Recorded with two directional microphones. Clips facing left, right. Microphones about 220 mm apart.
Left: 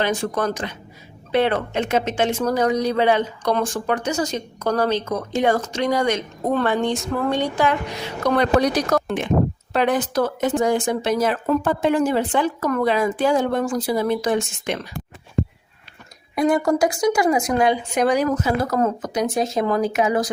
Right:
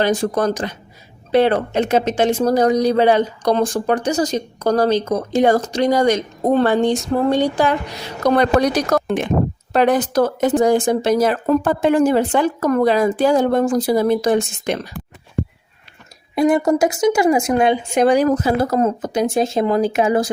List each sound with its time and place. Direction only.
0.0 s speech: 35° right (ahead or behind)
9.7 s speech: 40° right (ahead or behind)
16.3 s speech: 25° right (ahead or behind)